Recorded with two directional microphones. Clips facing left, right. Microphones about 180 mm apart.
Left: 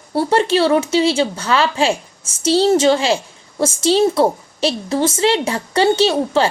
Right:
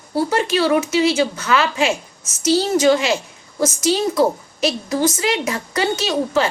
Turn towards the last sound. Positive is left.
turn(degrees=30)  # may be behind; listen again after turning